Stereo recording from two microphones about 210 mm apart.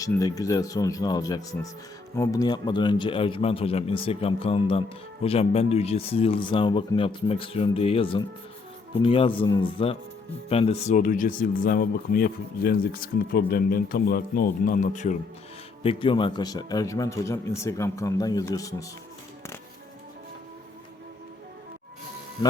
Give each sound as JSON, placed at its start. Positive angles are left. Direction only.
{"t": 0.0, "sound": "speech", "side_deg": 15}